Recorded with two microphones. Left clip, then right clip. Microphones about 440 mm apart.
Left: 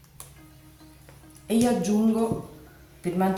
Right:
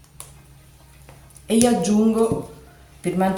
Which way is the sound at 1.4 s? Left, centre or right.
Left.